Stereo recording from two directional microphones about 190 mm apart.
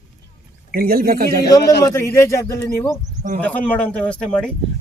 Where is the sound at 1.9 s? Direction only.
15° left (ahead or behind).